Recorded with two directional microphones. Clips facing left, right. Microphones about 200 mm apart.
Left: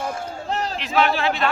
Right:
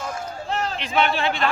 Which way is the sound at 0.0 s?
30° left (ahead or behind).